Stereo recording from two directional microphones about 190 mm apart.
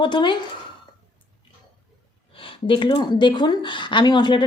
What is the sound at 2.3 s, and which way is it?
Speech, 25° left (ahead or behind).